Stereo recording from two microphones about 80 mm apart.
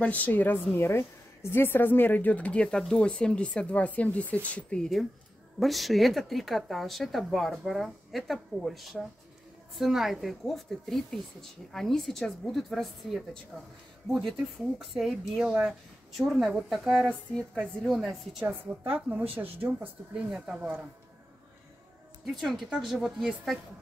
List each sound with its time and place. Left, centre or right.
0.0 s a woman's voice: centre
5.6 s a woman's voice: centre
16.1 s a woman's voice: centre
18.4 s speech: right
20.4 s speech: centre
22.2 s a woman's voice: centre